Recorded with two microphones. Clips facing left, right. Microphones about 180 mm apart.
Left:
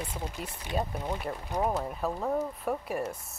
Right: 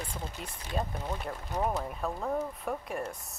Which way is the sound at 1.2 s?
5° left (ahead or behind).